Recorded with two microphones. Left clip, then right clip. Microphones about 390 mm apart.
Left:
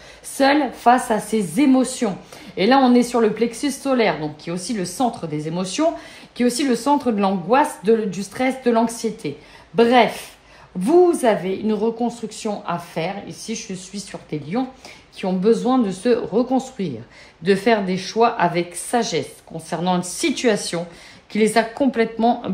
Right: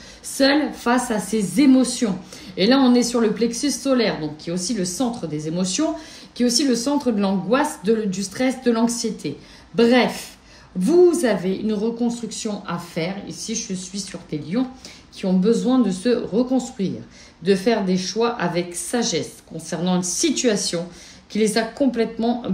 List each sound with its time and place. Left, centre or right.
0.4 s speech: centre